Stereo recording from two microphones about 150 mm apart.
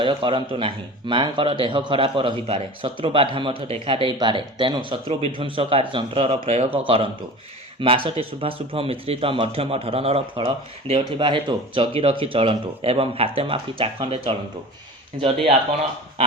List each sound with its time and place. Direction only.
0.0 s speech: 35° right (ahead or behind)